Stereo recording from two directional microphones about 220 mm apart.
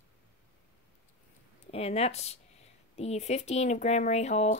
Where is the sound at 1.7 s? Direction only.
30° left (ahead or behind).